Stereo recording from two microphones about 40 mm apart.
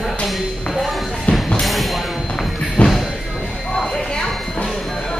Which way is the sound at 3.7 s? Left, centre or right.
Centre.